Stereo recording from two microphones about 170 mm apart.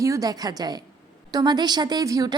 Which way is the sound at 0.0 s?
20° right (ahead or behind).